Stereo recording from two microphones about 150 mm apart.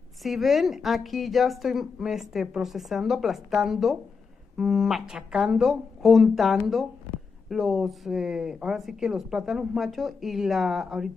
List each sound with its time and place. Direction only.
0.2 s speech: centre (ahead or behind)